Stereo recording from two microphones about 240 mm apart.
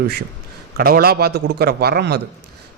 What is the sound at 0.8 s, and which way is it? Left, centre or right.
A man's voice, right.